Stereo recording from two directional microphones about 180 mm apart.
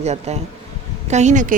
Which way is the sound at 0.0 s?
35° right (ahead or behind).